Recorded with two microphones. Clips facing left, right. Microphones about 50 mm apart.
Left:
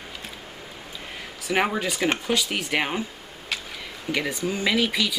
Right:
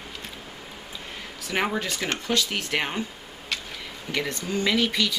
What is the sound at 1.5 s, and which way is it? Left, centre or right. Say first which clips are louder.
Speech: left 3 dB; centre.